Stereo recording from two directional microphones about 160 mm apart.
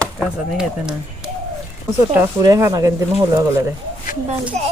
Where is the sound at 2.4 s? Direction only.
20° right (ahead or behind).